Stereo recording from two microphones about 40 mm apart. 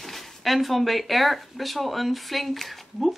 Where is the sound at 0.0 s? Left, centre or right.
Centre.